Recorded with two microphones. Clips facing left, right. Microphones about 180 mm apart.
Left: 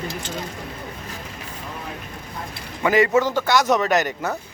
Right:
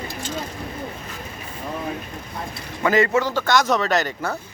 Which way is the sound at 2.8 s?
15° left (ahead or behind).